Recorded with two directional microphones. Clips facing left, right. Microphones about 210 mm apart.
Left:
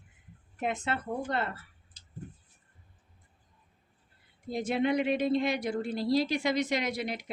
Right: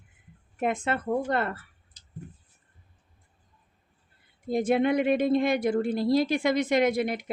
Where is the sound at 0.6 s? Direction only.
50° right (ahead or behind).